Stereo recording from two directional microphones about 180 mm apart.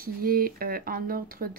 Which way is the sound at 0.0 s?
55° right (ahead or behind).